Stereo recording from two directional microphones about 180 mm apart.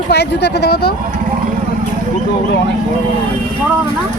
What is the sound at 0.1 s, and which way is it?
Speech, 70° left (ahead or behind).